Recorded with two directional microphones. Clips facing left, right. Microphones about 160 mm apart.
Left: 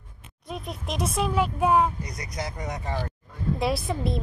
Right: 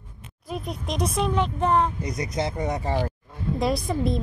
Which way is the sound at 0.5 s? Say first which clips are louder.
Right 3 dB; centre (ahead or behind).